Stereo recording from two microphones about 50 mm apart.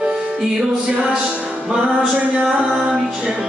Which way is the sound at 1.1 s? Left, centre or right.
Centre.